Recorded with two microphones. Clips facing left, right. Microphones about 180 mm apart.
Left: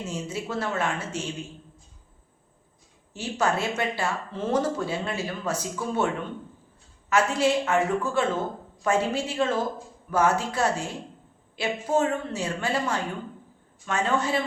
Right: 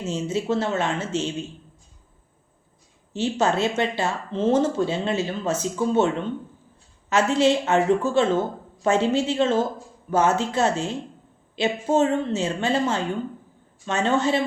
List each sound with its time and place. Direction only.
0.0 s speech: 25° right (ahead or behind)
3.1 s speech: 25° right (ahead or behind)
7.1 s speech: 25° right (ahead or behind)